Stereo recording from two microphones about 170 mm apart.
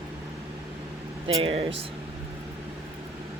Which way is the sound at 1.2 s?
30° right (ahead or behind).